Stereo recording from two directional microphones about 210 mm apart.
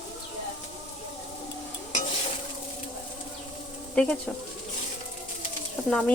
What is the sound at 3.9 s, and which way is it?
Speech, 5° left (ahead or behind).